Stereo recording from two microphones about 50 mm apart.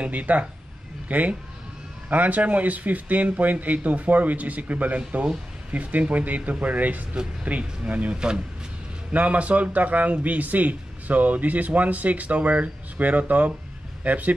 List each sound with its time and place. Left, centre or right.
0.0 s a man's voice: right